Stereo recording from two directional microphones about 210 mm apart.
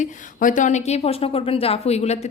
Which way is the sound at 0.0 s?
40° left (ahead or behind).